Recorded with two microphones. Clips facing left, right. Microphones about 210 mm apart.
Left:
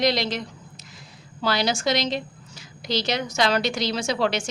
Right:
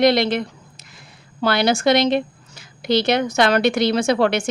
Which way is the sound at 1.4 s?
60° right (ahead or behind).